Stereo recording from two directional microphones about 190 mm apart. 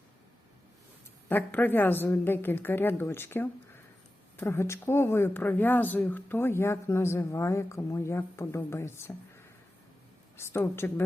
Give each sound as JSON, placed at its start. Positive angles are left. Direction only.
{"t": 1.3, "sound": "speech", "side_deg": 10}